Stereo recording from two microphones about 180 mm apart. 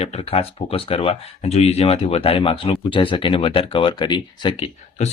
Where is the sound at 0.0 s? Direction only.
35° left (ahead or behind).